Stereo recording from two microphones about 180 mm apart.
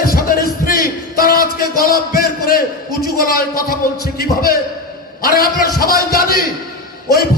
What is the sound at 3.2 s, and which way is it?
A man's voice, 55° left (ahead or behind).